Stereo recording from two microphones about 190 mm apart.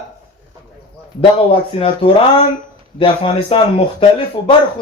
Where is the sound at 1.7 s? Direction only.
30° left (ahead or behind).